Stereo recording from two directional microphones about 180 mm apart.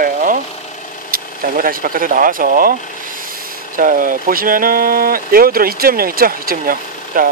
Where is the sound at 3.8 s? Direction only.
50° right (ahead or behind).